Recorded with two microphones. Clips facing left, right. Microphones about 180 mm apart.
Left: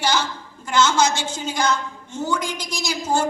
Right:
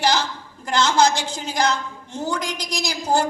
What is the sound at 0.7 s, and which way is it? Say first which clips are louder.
A woman's voice: right 1 dB; 35° right (ahead or behind).